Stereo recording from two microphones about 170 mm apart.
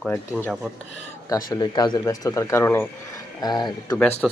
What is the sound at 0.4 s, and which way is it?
Speech, 5° right (ahead or behind).